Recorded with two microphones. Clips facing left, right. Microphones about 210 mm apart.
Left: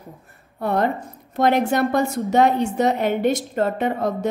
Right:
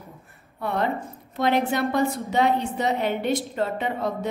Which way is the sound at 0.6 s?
40° left (ahead or behind).